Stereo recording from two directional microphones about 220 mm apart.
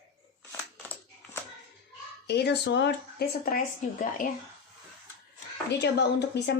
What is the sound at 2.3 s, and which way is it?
A woman's voice, 50° left (ahead or behind).